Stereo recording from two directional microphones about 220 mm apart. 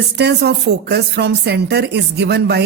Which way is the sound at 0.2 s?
50° right (ahead or behind).